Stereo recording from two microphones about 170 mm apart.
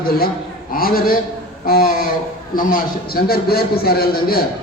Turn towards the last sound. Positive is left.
turn(degrees=60)  # may be behind; listen again after turning